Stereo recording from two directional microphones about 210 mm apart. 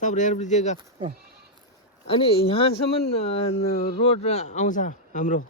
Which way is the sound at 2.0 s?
25° left (ahead or behind).